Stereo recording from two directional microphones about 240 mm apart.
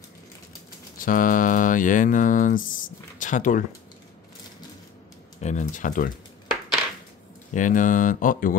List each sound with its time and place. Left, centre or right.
0.9 s speech: left
5.4 s speech: left
7.5 s speech: left